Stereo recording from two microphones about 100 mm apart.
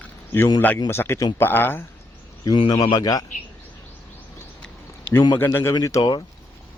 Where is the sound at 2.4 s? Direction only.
50° left (ahead or behind).